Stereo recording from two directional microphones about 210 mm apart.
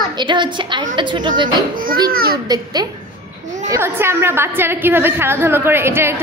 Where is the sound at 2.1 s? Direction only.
45° right (ahead or behind).